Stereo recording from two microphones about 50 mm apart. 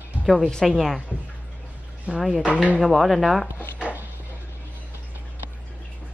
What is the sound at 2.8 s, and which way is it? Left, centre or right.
Speech, centre.